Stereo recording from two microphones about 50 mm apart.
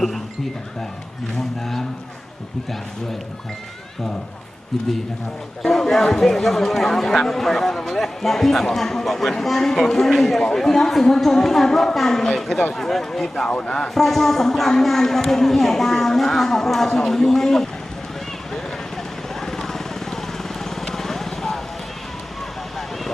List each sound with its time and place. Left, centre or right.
5.6 s speech: centre
13.5 s speech: left
13.7 s speech: centre
19.4 s vehicle: centre